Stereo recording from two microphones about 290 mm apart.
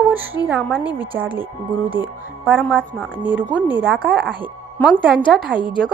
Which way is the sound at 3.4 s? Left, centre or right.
Centre.